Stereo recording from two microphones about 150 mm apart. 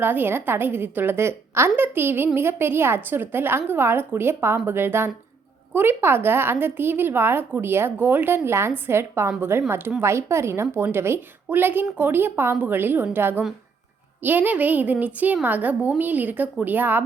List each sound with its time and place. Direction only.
0.0 s speech: 15° right (ahead or behind)